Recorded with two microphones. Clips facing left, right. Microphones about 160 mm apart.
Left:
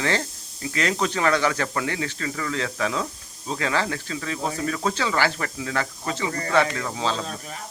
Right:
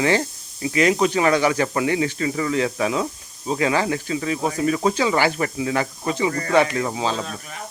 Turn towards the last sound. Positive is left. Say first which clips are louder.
# right 4 dB
turn(degrees=-10)  # may be behind; listen again after turning